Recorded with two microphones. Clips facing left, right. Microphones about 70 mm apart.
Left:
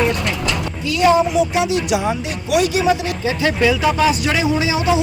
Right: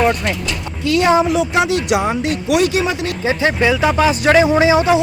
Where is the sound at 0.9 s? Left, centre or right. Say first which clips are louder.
Right 1 dB; right.